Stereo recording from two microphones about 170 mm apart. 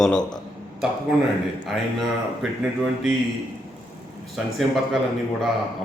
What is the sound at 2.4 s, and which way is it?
Speech, centre (ahead or behind).